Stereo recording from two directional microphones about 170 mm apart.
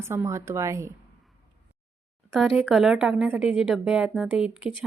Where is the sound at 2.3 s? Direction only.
Centre (ahead or behind).